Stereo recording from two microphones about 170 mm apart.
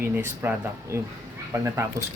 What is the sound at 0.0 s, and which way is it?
Speech, 10° right (ahead or behind).